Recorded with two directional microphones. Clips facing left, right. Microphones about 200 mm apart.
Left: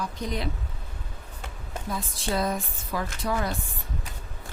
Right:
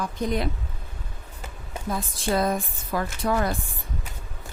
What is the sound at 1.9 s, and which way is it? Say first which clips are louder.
Speech: right 4 dB; 50° right (ahead or behind).